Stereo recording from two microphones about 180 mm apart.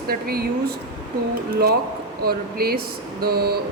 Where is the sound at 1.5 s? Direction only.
60° right (ahead or behind).